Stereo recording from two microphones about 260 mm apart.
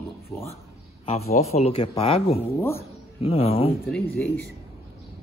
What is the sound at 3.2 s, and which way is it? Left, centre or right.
Speech, left.